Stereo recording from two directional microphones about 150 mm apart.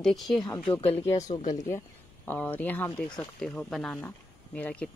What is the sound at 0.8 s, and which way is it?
Speech, 40° left (ahead or behind).